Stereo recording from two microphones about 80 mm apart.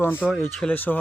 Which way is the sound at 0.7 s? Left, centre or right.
Left.